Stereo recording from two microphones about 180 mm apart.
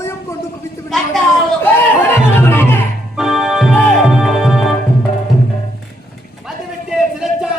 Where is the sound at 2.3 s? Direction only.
10° left (ahead or behind).